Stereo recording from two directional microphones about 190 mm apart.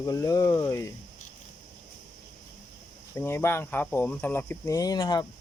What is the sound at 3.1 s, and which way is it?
Speech, 10° left (ahead or behind).